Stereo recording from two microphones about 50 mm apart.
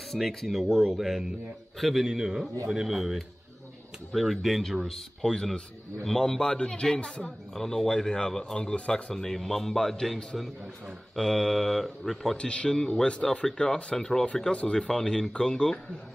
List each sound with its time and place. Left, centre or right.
0.3 s a man's voice: centre; by 7.3 s left
7.5 s speech: centre
9.1 s speech: centre
12.4 s speech: centre
14.2 s speech: left
14.9 s speech: centre